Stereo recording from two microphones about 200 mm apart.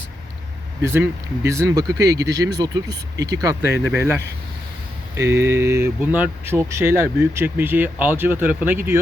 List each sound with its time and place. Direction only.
0.8 s speech: 10° right (ahead or behind)